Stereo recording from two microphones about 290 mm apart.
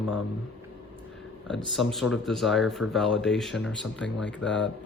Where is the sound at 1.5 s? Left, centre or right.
Centre.